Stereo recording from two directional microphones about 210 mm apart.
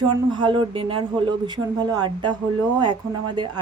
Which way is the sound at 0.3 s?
25° right (ahead or behind).